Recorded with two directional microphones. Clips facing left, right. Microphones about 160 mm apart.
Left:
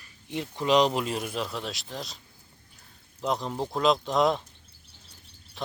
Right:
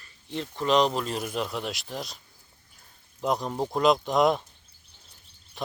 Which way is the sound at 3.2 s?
Centre (ahead or behind).